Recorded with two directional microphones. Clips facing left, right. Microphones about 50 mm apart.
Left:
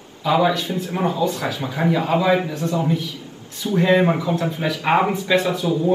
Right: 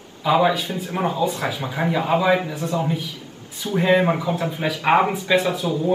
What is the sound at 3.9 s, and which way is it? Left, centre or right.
A man's voice, centre.